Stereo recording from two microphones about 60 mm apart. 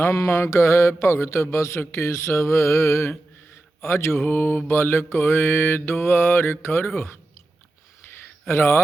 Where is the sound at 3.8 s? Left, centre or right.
Left.